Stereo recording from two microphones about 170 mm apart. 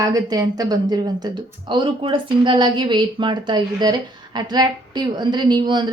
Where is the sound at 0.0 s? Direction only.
20° right (ahead or behind).